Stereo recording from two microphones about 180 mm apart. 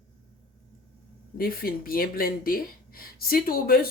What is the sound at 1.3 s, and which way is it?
Speech, 55° left (ahead or behind).